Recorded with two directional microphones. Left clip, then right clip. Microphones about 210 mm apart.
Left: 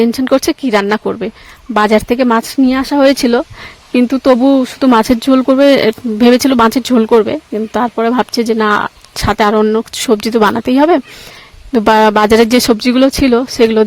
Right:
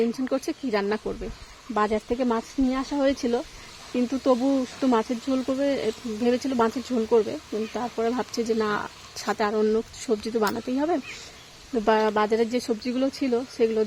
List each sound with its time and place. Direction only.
0.0 s speech: 45° left (ahead or behind)